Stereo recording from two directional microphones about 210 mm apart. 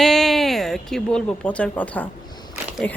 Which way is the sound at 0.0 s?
Centre (ahead or behind).